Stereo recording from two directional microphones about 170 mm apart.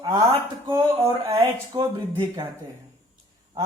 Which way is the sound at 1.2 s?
35° right (ahead or behind).